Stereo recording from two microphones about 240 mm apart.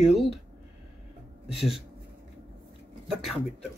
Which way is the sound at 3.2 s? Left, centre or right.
Centre.